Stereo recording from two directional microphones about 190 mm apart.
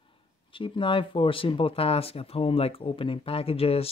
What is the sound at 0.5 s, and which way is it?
Speech, 25° left (ahead or behind).